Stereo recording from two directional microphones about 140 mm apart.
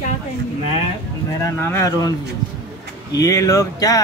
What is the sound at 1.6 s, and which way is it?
Speech, 20° left (ahead or behind).